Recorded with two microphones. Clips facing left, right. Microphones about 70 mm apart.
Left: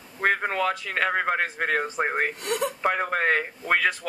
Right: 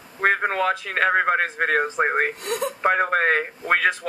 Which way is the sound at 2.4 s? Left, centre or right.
Right.